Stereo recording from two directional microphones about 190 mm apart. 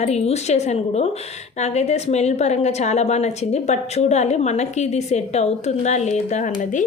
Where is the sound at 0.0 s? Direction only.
35° left (ahead or behind).